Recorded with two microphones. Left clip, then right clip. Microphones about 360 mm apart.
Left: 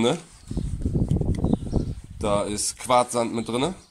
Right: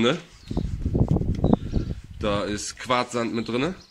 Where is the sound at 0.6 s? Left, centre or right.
Right.